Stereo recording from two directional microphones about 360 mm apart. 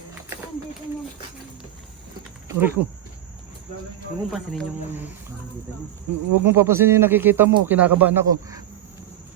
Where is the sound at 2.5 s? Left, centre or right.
Centre.